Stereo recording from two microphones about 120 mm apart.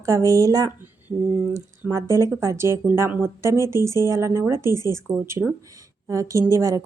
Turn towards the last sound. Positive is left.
turn(degrees=-25)  # may be behind; listen again after turning